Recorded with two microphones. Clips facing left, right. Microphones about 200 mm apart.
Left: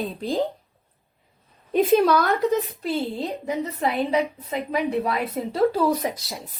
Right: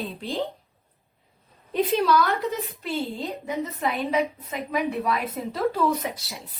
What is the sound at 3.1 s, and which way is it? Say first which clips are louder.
A woman's voice: left 3 dB; 35° left (ahead or behind).